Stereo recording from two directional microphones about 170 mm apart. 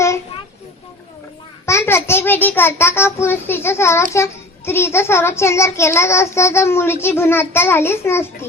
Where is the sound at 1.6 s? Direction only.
15° left (ahead or behind).